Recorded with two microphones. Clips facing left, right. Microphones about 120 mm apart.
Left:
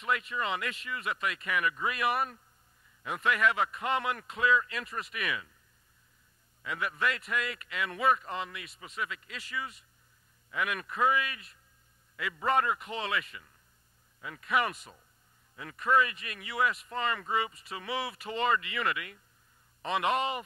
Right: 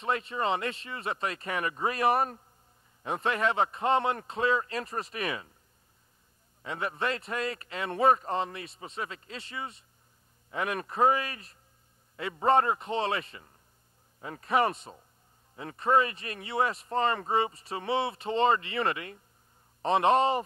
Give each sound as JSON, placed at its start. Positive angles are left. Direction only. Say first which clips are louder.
{"t": 0.0, "sound": "speech", "louder": "right 3 dB", "side_deg": -30}
{"t": 6.6, "sound": "speech", "louder": "right 1 dB", "side_deg": -30}